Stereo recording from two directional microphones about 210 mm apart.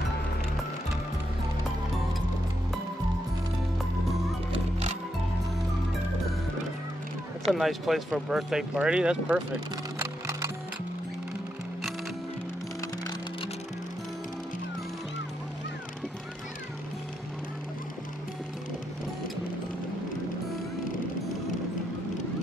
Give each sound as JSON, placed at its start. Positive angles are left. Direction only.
{"t": 4.5, "sound": "music", "side_deg": -30}
{"t": 7.5, "sound": "speech", "side_deg": 0}
{"t": 9.9, "sound": "music", "side_deg": -15}